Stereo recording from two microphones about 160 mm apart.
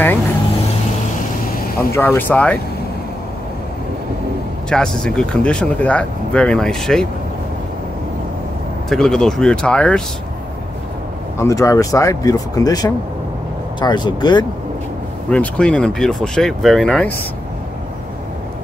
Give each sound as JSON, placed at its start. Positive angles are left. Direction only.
{"t": 1.8, "sound": "speech", "side_deg": 15}
{"t": 4.6, "sound": "speech", "side_deg": 5}
{"t": 8.8, "sound": "speech", "side_deg": 5}
{"t": 11.3, "sound": "speech", "side_deg": 20}
{"t": 15.2, "sound": "speech", "side_deg": 5}